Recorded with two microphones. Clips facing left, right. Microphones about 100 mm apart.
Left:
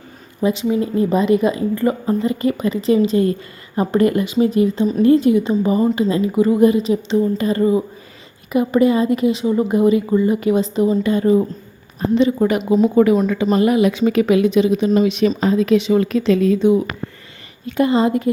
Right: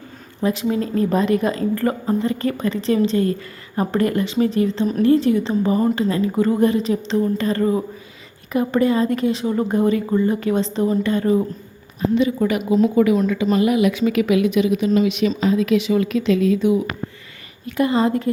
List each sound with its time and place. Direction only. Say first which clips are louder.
0.4 s a woman's voice: left 3 dB; 5° left (ahead or behind)
3.8 s a woman's voice: left 3 dB; 20° left (ahead or behind)
11.9 s a woman's voice: left 3 dB; 35° left (ahead or behind)
16.6 s a woman's voice: left 3 dB; 25° left (ahead or behind)